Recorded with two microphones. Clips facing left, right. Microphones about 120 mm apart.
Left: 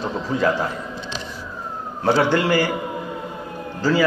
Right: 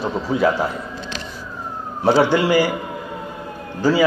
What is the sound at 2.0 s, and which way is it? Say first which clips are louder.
Speech: right 2 dB; 15° right (ahead or behind).